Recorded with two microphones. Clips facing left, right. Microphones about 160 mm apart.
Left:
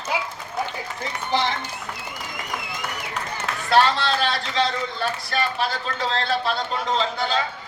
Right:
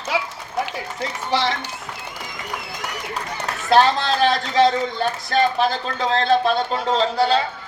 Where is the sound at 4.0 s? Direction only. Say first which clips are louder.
Right 4 dB; 45° right (ahead or behind).